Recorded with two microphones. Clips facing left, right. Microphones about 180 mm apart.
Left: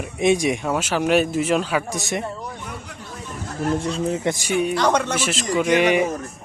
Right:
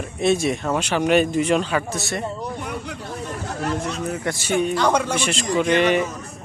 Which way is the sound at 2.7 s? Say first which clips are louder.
Right 5 dB; 70° right (ahead or behind).